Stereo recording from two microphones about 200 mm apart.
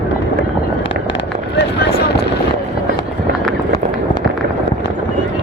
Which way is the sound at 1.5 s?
50° left (ahead or behind).